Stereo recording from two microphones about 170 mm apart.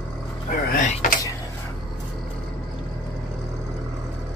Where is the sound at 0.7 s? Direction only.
50° left (ahead or behind).